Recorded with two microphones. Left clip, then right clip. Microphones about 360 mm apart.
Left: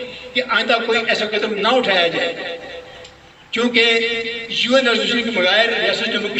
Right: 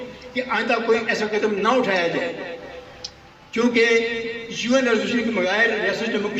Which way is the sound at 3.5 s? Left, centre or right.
Left.